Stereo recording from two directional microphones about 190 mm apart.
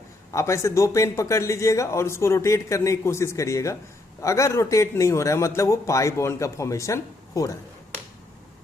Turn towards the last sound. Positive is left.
turn(degrees=15)  # may be behind; listen again after turning